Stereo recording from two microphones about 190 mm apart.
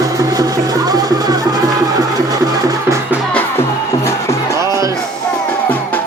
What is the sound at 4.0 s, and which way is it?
Music, 15° left (ahead or behind).